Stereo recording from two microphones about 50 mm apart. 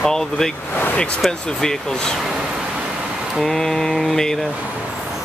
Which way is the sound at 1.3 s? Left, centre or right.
Centre.